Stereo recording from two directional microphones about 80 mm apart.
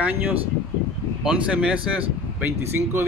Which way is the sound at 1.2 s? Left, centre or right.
Centre.